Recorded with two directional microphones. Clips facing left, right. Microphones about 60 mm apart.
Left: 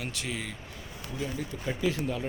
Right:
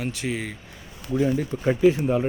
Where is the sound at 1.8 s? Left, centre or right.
Right.